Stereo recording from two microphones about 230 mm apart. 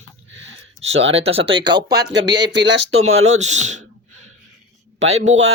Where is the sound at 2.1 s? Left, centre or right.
Right.